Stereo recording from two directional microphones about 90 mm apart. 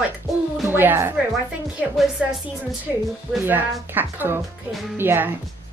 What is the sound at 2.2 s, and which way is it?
Speech, 5° right (ahead or behind).